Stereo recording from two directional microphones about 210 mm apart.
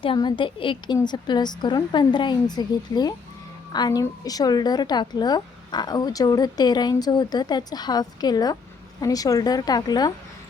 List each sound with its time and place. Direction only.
0.0 s a woman's voice: 20° left (ahead or behind)